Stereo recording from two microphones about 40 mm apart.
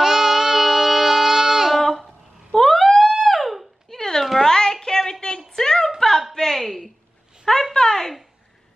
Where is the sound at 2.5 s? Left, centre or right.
Centre.